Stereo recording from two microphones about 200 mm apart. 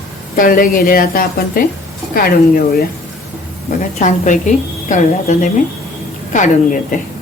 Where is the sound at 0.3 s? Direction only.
45° left (ahead or behind).